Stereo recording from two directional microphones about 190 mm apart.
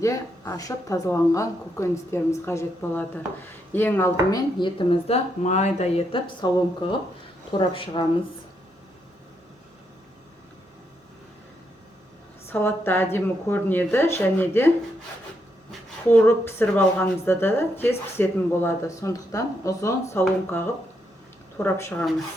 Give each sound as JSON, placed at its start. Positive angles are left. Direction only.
{"t": 0.0, "sound": "a woman's voice", "side_deg": 15}
{"t": 12.5, "sound": "a woman's voice", "side_deg": 10}
{"t": 16.0, "sound": "a woman's voice", "side_deg": 10}
{"t": 21.6, "sound": "a woman's voice", "side_deg": 10}